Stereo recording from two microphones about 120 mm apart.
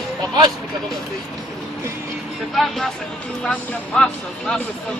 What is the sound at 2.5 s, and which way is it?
Speech, centre (ahead or behind).